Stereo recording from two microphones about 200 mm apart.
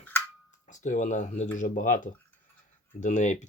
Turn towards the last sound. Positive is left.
turn(degrees=35)  # may be behind; listen again after turning